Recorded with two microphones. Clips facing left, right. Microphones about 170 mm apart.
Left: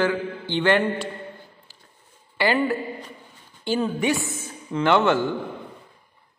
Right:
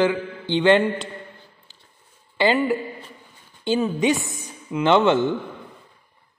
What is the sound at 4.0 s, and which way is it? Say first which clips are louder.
A man's voice: right 3 dB; 20° right (ahead or behind).